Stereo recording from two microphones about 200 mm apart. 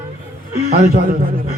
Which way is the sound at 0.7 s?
45° right (ahead or behind).